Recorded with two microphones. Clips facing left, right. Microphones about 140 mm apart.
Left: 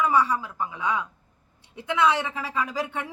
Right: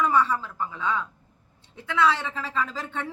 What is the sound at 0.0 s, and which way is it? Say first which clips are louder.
A man's voice: even; 10° left (ahead or behind).